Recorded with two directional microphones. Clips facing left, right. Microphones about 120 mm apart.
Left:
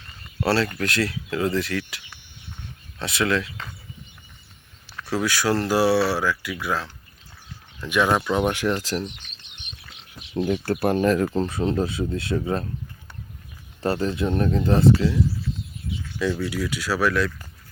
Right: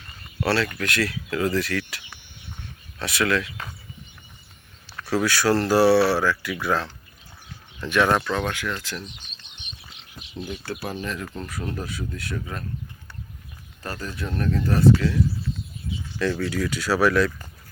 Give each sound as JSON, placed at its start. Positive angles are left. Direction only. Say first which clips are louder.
{"t": 0.4, "sound": "speech", "louder": "left 1 dB", "side_deg": 30}
{"t": 3.0, "sound": "speech", "louder": "even", "side_deg": 25}
{"t": 5.1, "sound": "speech", "louder": "right 2 dB", "side_deg": 15}
{"t": 7.9, "sound": "speech", "louder": "even", "side_deg": 10}
{"t": 8.5, "sound": "speech", "louder": "left 7 dB", "side_deg": 30}
{"t": 10.4, "sound": "speech", "louder": "left 9 dB", "side_deg": 55}
{"t": 13.8, "sound": "speech", "louder": "left 9 dB", "side_deg": 30}
{"t": 16.1, "sound": "speech", "louder": "even", "side_deg": 10}